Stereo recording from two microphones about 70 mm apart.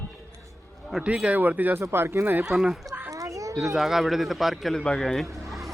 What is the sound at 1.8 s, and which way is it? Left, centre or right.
Speech, right.